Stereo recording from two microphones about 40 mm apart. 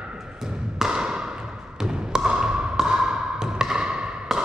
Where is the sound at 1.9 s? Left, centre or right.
Centre.